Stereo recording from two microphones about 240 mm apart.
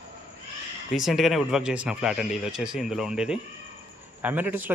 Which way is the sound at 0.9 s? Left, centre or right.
Centre.